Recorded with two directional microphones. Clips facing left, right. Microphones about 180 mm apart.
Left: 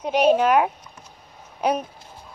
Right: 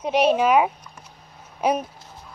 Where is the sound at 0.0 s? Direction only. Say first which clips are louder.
Left 1 dB; 5° right (ahead or behind).